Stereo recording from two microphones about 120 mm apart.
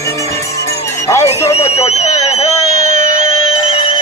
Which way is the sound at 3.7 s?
55° left (ahead or behind).